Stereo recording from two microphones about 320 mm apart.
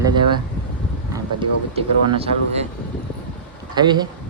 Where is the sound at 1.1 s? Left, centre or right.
Centre.